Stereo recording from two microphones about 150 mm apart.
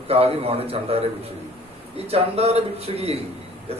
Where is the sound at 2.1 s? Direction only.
40° right (ahead or behind).